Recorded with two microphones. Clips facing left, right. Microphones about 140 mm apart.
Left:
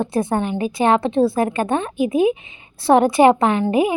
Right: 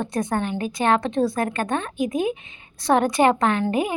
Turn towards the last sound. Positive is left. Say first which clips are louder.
# left 4 dB
turn(degrees=5)  # may be behind; listen again after turning